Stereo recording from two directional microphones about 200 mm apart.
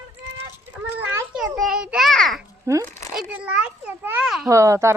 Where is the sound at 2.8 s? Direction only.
15° left (ahead or behind).